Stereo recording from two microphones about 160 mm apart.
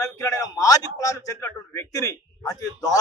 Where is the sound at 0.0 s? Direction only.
20° left (ahead or behind).